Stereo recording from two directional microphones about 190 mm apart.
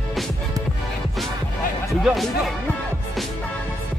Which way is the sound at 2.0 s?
Centre (ahead or behind).